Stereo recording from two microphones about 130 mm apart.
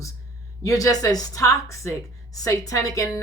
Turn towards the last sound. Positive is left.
turn(degrees=25)  # may be behind; listen again after turning